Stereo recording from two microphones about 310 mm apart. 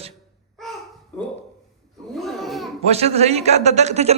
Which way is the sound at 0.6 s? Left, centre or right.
Centre.